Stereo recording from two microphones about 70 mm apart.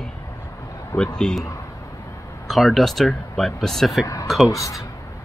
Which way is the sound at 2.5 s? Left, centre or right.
Centre.